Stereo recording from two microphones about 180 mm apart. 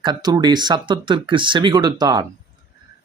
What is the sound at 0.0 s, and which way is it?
Speech, 25° right (ahead or behind).